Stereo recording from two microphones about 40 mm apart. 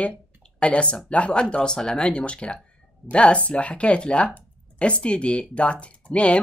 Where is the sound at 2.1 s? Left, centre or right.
Left.